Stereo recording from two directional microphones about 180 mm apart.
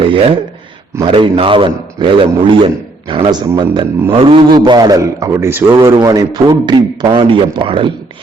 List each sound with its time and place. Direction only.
0.0 s a man's voice: 30° right (ahead or behind)